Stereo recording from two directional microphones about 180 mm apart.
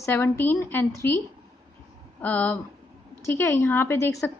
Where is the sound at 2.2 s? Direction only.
10° left (ahead or behind).